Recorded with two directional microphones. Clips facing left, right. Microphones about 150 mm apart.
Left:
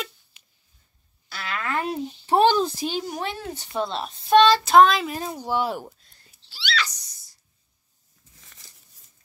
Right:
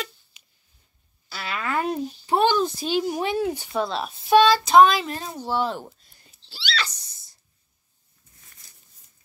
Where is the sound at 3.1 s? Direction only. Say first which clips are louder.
Right 6 dB; 15° right (ahead or behind).